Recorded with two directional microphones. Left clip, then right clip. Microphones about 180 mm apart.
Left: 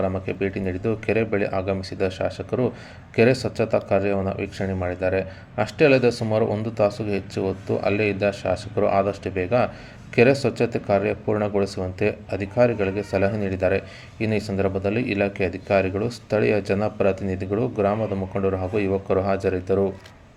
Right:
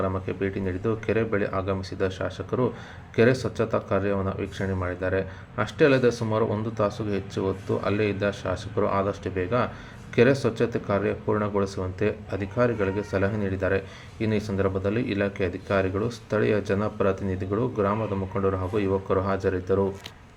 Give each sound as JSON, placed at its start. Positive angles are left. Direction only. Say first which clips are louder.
{"t": 0.0, "sound": "speech", "louder": "left 3 dB", "side_deg": 20}